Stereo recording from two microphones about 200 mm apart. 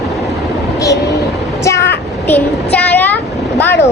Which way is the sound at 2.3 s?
10° left (ahead or behind).